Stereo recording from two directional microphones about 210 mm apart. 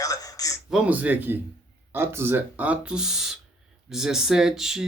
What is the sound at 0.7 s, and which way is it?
Speech, 5° right (ahead or behind).